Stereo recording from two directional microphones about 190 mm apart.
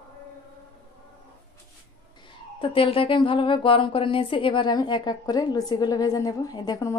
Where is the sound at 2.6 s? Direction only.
30° left (ahead or behind).